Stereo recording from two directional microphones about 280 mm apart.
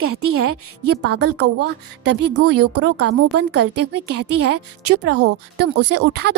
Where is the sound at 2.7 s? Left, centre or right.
Right.